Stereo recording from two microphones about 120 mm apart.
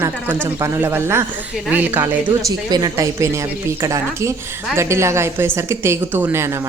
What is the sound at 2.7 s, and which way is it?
A woman's voice, 30° right (ahead or behind).